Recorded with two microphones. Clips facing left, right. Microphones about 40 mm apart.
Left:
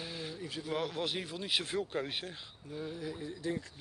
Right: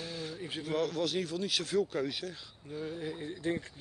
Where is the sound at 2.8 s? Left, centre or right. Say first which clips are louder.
Right 2 dB; right.